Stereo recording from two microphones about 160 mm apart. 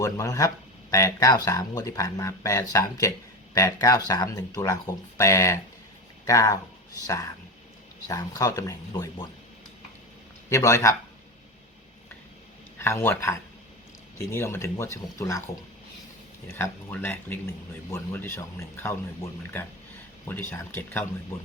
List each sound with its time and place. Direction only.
0.0 s speech: 20° left (ahead or behind)
10.5 s speech: 20° left (ahead or behind)
12.8 s speech: 15° left (ahead or behind)
16.6 s speech: 15° left (ahead or behind)